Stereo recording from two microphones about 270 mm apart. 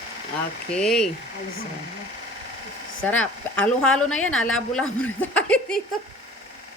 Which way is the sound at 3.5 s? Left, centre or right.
Centre.